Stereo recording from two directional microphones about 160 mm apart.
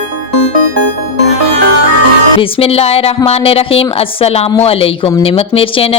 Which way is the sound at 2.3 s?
35° left (ahead or behind).